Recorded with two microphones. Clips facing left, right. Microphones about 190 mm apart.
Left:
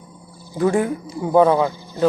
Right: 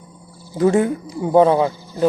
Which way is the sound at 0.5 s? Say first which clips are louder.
Right 3 dB; 25° right (ahead or behind).